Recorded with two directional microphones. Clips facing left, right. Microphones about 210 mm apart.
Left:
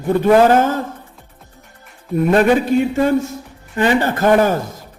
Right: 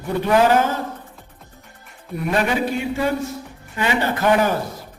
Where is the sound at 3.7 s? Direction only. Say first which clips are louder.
Left 6 dB; 50° left (ahead or behind).